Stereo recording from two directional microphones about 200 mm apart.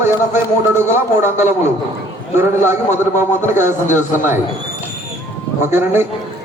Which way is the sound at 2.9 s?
35° left (ahead or behind).